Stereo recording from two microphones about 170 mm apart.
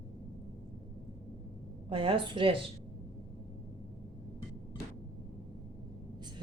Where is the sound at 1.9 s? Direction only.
30° right (ahead or behind).